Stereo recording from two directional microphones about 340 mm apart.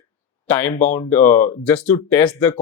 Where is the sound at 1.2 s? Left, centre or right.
Left.